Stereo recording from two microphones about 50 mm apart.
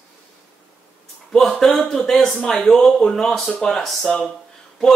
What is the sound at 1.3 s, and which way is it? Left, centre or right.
Speech, centre.